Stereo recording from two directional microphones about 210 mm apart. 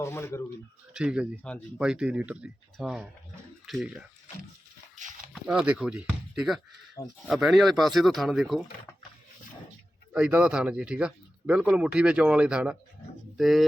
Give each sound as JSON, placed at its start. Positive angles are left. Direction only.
{"t": 0.0, "sound": "speech", "side_deg": 10}
{"t": 0.9, "sound": "speech", "side_deg": -5}
{"t": 4.9, "sound": "a sound", "side_deg": -35}
{"t": 5.3, "sound": "speech", "side_deg": -5}
{"t": 10.1, "sound": "speech", "side_deg": -5}